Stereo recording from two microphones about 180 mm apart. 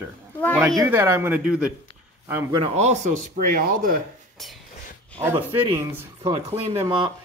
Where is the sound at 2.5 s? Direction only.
35° right (ahead or behind); by 4.0 s 50° right (ahead or behind).